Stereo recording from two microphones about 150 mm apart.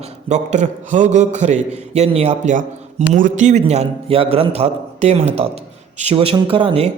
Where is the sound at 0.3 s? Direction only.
50° right (ahead or behind).